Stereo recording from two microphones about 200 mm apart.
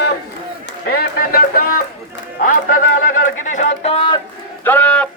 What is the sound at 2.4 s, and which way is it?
Run, 45° left (ahead or behind).